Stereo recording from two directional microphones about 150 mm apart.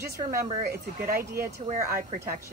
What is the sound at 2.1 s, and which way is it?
Speech, 75° right (ahead or behind).